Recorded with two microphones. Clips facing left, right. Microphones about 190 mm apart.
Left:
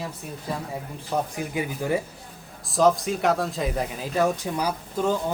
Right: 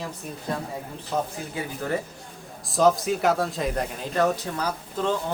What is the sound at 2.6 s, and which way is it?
Speech, centre (ahead or behind).